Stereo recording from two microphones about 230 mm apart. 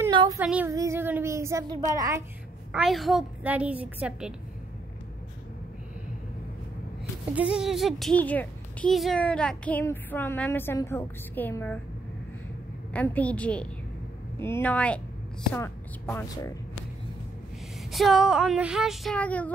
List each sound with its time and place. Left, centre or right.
0.0 s female singing: centre
0.4 s speech: centre
2.7 s a woman's voice: centre
7.3 s speech: centre
12.9 s a woman's voice: centre
17.9 s a woman's voice: centre